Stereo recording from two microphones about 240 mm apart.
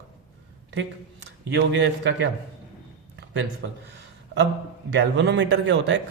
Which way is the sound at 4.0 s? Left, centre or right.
Right.